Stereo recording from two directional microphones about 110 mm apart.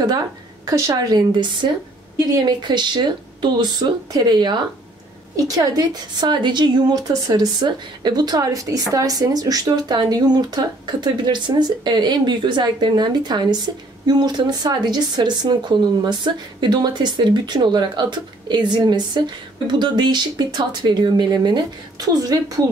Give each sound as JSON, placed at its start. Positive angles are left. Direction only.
{"t": 0.7, "sound": "a woman's voice", "side_deg": -30}